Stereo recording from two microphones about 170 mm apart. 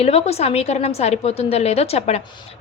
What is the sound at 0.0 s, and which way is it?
A woman's voice, 40° left (ahead or behind).